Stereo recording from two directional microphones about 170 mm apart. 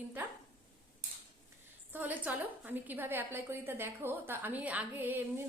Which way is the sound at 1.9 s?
10° right (ahead or behind).